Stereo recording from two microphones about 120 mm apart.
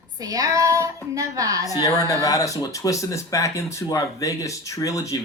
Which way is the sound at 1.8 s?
30° left (ahead or behind).